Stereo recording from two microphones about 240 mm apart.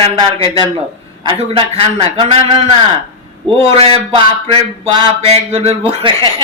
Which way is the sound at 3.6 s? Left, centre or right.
Right.